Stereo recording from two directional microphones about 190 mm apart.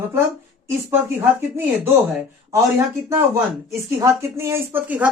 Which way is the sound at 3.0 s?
15° right (ahead or behind).